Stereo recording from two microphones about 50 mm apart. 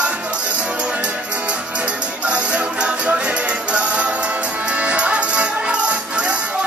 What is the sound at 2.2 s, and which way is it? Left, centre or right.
Music, right.